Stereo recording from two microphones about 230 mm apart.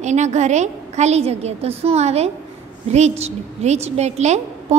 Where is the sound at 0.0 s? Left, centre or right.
Right.